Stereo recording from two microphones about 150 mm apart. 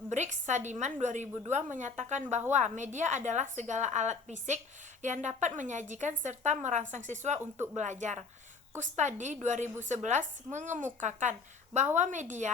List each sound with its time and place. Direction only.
0.1 s a woman's voice: 55° right (ahead or behind)